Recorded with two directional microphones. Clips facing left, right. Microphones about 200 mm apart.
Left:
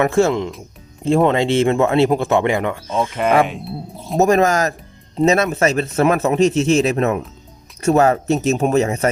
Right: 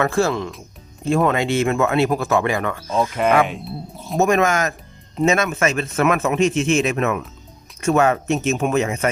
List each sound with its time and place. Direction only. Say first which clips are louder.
0.0 s speech: left 4 dB; 20° left (ahead or behind)
3.4 s speech: left 1 dB; centre (ahead or behind)
4.2 s speech: left 3 dB; 35° left (ahead or behind)